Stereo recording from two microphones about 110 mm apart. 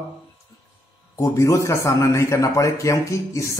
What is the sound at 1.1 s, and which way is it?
A man's voice, 30° left (ahead or behind).